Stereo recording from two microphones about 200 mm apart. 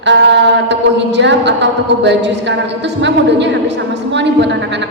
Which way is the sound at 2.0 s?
60° right (ahead or behind).